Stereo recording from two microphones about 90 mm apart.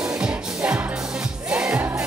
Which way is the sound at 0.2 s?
10° right (ahead or behind).